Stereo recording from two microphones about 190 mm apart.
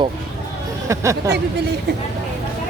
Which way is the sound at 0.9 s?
15° right (ahead or behind).